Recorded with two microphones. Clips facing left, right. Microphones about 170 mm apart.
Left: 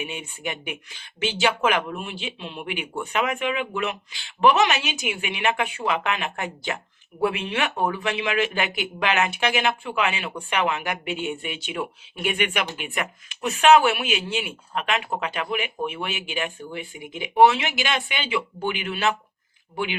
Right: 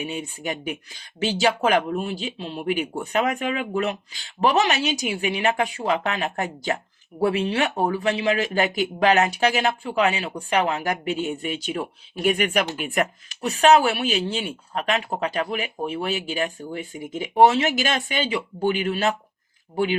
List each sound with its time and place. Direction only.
0.0 s speech: 35° right (ahead or behind)